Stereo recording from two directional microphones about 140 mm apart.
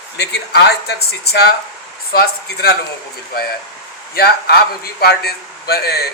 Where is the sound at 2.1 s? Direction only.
90° left.